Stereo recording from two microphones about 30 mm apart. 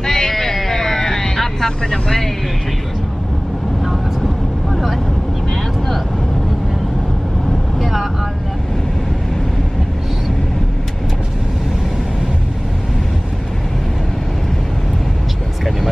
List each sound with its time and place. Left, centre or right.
0.0 s a sound: left
0.3 s a sound: centre
1.0 s vehicle: left
1.9 s speech: centre
4.6 s vehicle: centre
7.8 s vehicle: centre